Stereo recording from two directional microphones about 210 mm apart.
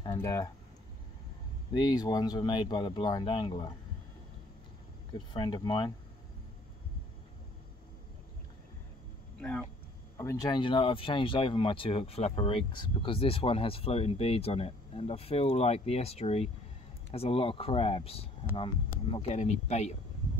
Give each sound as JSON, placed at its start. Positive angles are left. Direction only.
{"t": 0.0, "sound": "speech", "side_deg": 15}
{"t": 1.7, "sound": "speech", "side_deg": 20}
{"t": 5.1, "sound": "speech", "side_deg": 20}
{"t": 9.4, "sound": "speech", "side_deg": 5}
{"t": 10.1, "sound": "speech", "side_deg": 15}